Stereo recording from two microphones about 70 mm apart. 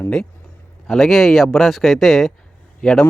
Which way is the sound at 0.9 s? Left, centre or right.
Centre.